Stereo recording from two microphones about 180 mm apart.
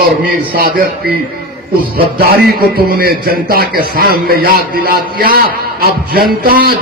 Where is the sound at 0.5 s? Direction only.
55° right (ahead or behind).